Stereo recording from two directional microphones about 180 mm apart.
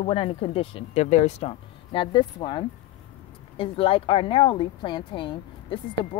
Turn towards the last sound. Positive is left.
turn(degrees=30)  # may be behind; listen again after turning